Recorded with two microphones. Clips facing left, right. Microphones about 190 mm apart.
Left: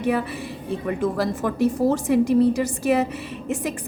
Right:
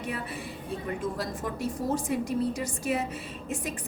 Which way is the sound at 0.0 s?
75° left (ahead or behind).